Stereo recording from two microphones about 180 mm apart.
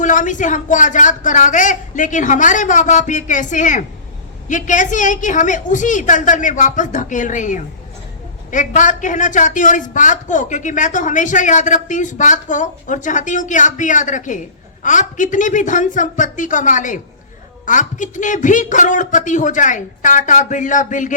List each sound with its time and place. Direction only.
0.0 s a man's voice: 45° left (ahead or behind)